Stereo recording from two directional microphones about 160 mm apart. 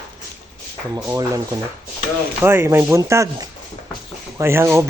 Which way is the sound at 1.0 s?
20° right (ahead or behind).